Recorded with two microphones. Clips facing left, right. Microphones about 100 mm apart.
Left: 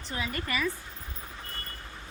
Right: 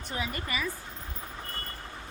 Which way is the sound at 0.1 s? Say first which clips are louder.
Left 1 dB; 20° right (ahead or behind).